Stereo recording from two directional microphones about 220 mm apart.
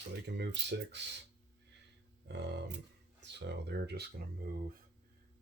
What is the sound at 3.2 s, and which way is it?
Speech, 50° right (ahead or behind).